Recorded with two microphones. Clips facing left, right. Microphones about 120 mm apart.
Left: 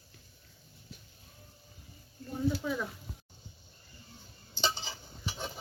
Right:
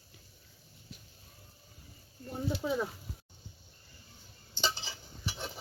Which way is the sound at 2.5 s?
30° right (ahead or behind).